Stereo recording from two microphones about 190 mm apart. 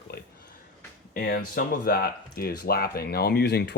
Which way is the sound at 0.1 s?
55° left (ahead or behind).